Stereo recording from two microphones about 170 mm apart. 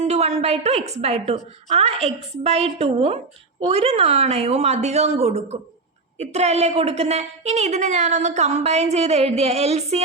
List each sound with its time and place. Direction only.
0.0 s a woman's voice: 40° right (ahead or behind)